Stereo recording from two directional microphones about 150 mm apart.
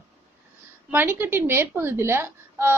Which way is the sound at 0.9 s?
15° right (ahead or behind).